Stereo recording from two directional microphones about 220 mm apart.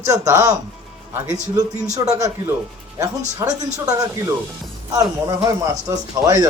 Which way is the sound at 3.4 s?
15° right (ahead or behind).